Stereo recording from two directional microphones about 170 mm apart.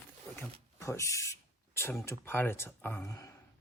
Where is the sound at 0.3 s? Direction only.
15° left (ahead or behind).